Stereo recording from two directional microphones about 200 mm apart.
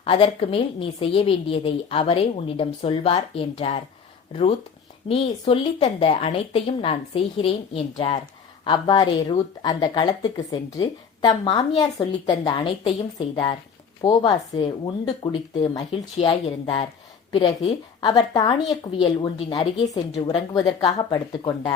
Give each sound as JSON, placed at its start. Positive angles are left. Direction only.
{"t": 0.0, "sound": "speech", "side_deg": 30}
{"t": 18.0, "sound": "speech", "side_deg": 20}